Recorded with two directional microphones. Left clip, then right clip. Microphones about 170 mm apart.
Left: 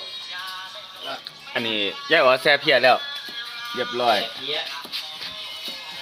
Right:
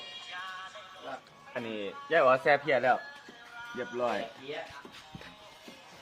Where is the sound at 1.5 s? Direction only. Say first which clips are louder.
Left 13 dB; 40° left (ahead or behind).